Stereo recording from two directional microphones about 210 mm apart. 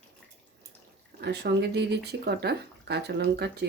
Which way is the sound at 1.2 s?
55° right (ahead or behind).